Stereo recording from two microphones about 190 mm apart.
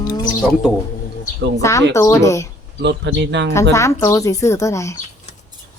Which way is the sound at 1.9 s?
15° left (ahead or behind).